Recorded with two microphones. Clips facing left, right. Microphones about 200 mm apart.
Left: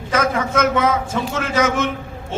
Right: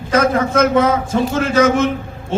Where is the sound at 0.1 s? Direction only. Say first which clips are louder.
Right 5 dB; 30° right (ahead or behind).